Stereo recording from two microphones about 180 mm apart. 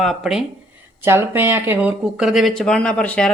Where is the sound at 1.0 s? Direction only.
15° right (ahead or behind).